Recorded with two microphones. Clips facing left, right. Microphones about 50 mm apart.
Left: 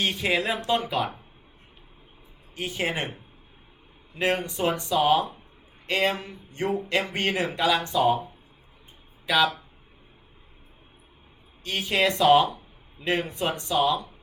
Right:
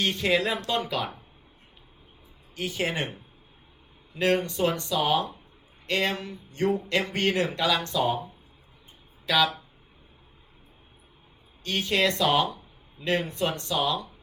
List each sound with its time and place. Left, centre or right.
0.0 s speech: centre
2.6 s speech: centre
6.7 s speech: centre
9.2 s speech: centre
11.6 s speech: centre